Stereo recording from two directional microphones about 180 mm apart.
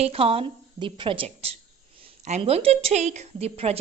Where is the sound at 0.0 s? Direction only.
30° right (ahead or behind).